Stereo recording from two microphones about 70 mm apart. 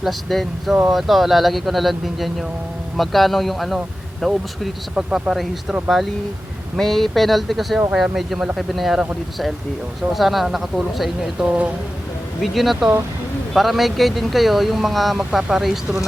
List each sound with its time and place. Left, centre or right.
0.0 s speech: centre
6.7 s speech: centre
11.4 s speech: centre
12.4 s speech: centre